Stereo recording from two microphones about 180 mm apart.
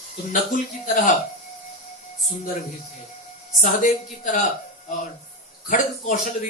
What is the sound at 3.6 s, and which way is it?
Speech, 45° left (ahead or behind).